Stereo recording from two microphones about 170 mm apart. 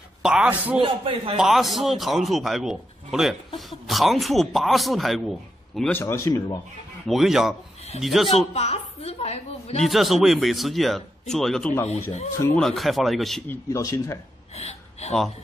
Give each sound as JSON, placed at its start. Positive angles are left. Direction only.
{"t": 0.2, "sound": "a man's voice", "side_deg": -5}
{"t": 0.8, "sound": "speech", "side_deg": -30}
{"t": 1.3, "sound": "a man's voice", "side_deg": 0}
{"t": 5.8, "sound": "speech", "side_deg": 10}
{"t": 7.1, "sound": "a man's voice", "side_deg": 0}
{"t": 8.5, "sound": "a woman's voice", "side_deg": 40}
{"t": 9.8, "sound": "a man's voice", "side_deg": 0}
{"t": 11.9, "sound": "a woman's voice", "side_deg": 40}
{"t": 12.5, "sound": "a man's voice", "side_deg": 0}
{"t": 13.5, "sound": "speech", "side_deg": 20}
{"t": 14.5, "sound": "a sound", "side_deg": 40}